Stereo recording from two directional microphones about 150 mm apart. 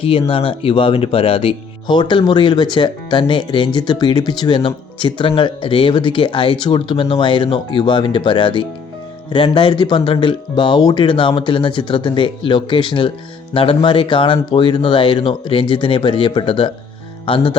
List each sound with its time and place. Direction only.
0.0 s speech: 35° left (ahead or behind)
17.2 s music: 35° left (ahead or behind)